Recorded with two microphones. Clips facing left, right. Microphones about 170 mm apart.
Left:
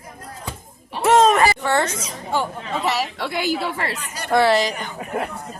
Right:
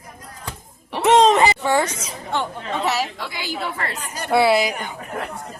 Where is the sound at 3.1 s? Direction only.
60° left (ahead or behind).